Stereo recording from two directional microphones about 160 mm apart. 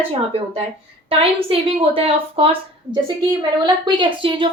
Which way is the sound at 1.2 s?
35° right (ahead or behind).